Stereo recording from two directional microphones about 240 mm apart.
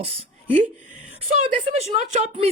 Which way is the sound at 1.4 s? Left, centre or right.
Right.